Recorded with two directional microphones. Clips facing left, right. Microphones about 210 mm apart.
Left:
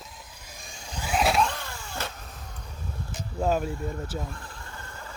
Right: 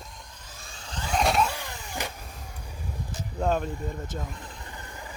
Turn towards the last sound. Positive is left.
turn(degrees=-15)  # may be behind; listen again after turning